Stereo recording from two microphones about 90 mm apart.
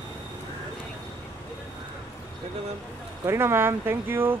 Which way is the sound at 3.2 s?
30° right (ahead or behind).